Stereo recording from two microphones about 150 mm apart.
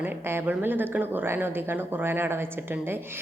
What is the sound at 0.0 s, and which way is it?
A woman's voice, 15° right (ahead or behind).